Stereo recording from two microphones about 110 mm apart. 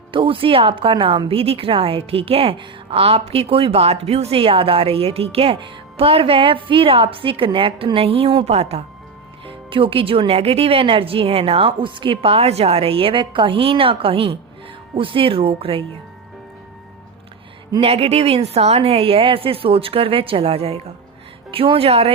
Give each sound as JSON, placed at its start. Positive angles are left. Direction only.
{"t": 0.1, "sound": "a woman's voice", "side_deg": -50}
{"t": 8.4, "sound": "speech", "side_deg": -70}
{"t": 9.5, "sound": "a woman's voice", "side_deg": -50}
{"t": 17.7, "sound": "a woman's voice", "side_deg": -65}